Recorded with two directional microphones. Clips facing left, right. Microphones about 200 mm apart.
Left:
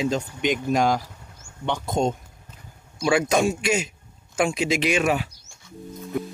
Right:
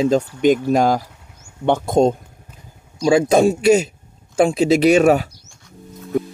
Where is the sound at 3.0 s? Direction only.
30° right (ahead or behind).